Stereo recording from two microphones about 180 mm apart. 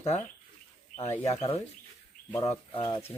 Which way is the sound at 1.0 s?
35° left (ahead or behind).